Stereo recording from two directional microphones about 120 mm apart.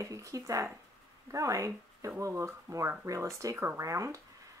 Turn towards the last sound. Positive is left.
turn(degrees=-25)  # may be behind; listen again after turning